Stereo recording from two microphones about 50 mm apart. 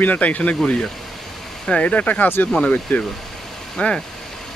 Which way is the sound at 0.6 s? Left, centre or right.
Centre.